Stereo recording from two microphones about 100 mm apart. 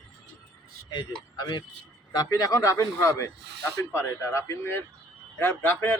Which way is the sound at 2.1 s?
40° left (ahead or behind).